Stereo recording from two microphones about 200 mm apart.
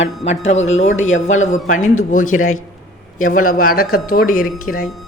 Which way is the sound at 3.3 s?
40° left (ahead or behind).